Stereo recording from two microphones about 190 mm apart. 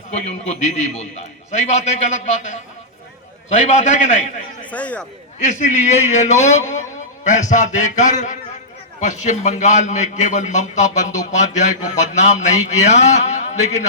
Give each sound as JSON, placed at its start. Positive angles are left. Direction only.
{"t": 0.1, "sound": "a man's voice", "side_deg": 35}
{"t": 4.7, "sound": "speech", "side_deg": 5}
{"t": 5.4, "sound": "a man's voice", "side_deg": 40}